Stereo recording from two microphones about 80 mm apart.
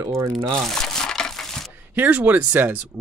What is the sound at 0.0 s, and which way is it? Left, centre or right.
Speech, right.